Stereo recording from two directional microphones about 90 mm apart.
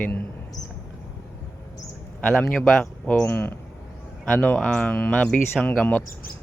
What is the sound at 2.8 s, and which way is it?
Speech, 10° left (ahead or behind).